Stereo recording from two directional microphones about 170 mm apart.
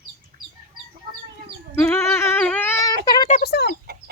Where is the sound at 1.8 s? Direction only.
15° left (ahead or behind).